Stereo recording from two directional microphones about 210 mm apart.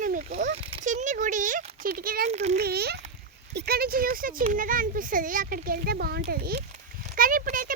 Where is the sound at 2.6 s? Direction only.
50° right (ahead or behind).